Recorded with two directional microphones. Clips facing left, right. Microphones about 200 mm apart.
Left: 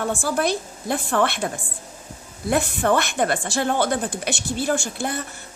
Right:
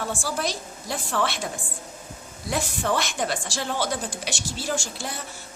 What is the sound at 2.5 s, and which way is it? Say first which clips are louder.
Speech: left 6 dB; 55° left (ahead or behind).